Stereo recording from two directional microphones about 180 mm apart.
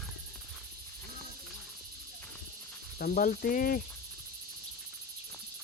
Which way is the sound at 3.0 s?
50° left (ahead or behind).